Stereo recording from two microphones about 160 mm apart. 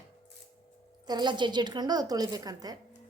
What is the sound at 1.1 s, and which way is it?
A woman's voice, 25° right (ahead or behind).